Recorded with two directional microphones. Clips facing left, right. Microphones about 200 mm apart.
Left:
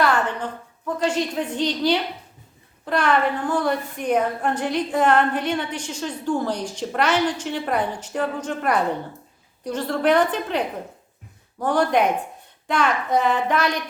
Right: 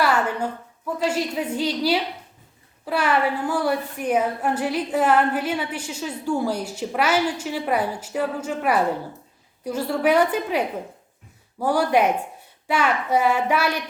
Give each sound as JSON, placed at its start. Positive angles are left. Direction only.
{"t": 0.0, "sound": "a woman's voice", "side_deg": -10}
{"t": 11.6, "sound": "a woman's voice", "side_deg": -10}